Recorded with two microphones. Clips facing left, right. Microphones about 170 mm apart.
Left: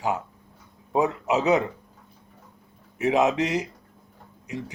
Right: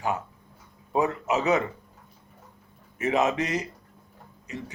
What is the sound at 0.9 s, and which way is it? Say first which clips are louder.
Speech: left 2 dB; 15° left (ahead or behind).